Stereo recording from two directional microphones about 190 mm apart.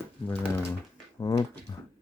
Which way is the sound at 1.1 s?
20° left (ahead or behind).